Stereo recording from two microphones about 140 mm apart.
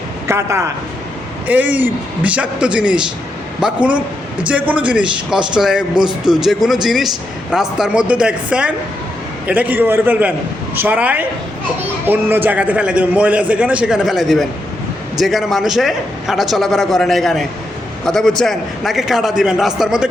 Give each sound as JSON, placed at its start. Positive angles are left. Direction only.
{"t": 0.3, "sound": "a man's voice", "side_deg": -20}